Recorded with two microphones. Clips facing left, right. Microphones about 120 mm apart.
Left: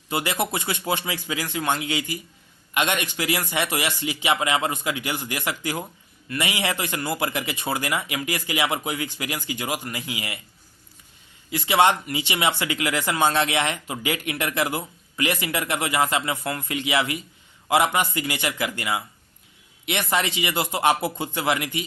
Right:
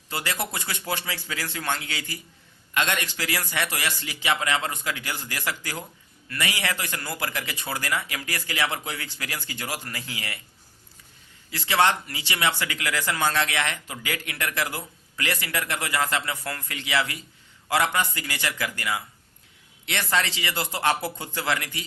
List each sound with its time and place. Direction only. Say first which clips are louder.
0.1 s a man's voice: left 5 dB; 20° left (ahead or behind)
11.5 s speech: left 3 dB; 20° left (ahead or behind)